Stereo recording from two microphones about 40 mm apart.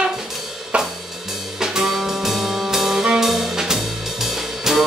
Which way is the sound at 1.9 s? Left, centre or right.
Centre.